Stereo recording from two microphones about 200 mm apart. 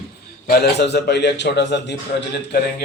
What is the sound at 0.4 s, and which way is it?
A man's voice, 55° left (ahead or behind).